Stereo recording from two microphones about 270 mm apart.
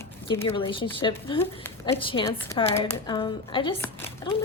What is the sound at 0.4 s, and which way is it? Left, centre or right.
A woman's voice, centre.